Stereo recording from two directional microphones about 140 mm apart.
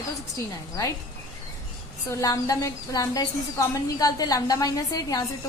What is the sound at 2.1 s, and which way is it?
A woman's voice, 25° left (ahead or behind).